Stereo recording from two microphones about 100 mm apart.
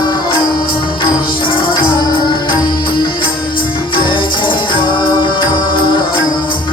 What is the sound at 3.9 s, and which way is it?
Music, 55° left (ahead or behind).